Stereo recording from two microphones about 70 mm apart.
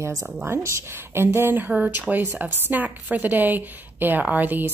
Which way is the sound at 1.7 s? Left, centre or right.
Right.